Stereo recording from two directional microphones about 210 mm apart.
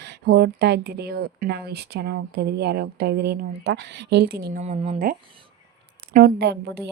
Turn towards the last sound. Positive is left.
turn(degrees=-50)  # may be behind; listen again after turning